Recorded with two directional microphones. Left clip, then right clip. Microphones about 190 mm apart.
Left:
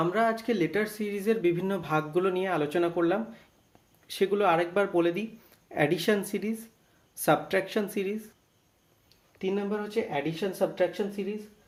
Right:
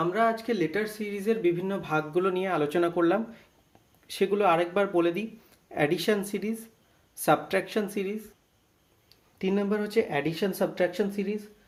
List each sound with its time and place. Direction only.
0.0 s speech: 15° left (ahead or behind)
9.4 s speech: 25° right (ahead or behind)